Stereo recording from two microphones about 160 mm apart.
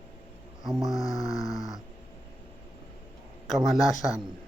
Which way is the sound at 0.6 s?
Centre (ahead or behind).